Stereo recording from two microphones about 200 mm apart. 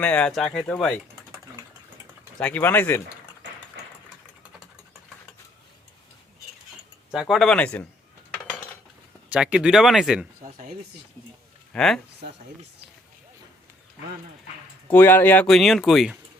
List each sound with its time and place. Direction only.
0.0 s speech: 5° left (ahead or behind)
2.4 s speech: 10° left (ahead or behind)
7.1 s speech: centre (ahead or behind)
9.3 s speech: 5° right (ahead or behind)
11.7 s speech: 5° left (ahead or behind)
14.9 s speech: 10° left (ahead or behind)